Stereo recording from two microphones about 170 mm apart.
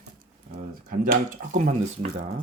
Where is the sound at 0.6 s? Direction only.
50° right (ahead or behind).